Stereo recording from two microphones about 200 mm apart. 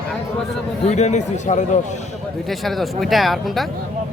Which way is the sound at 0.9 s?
35° left (ahead or behind).